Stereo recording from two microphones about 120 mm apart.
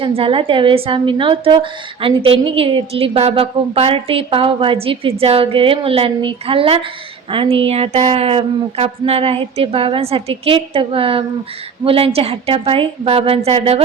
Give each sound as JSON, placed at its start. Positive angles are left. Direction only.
{"t": 0.0, "sound": "a woman's voice", "side_deg": -50}